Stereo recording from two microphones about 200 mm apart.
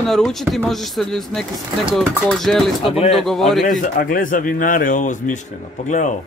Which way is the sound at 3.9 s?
45° left (ahead or behind).